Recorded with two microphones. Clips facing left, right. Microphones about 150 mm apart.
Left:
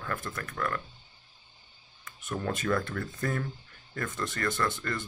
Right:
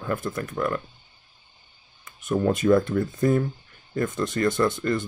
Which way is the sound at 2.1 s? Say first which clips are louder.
Right 10 dB; 20° right (ahead or behind).